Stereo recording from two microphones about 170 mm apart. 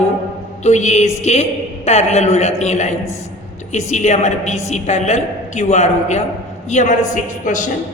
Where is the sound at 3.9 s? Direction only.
45° left (ahead or behind).